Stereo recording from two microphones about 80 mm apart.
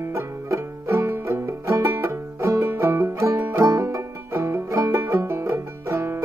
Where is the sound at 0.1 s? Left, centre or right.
Right.